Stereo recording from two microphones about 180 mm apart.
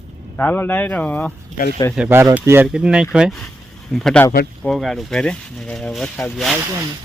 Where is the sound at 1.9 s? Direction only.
10° right (ahead or behind).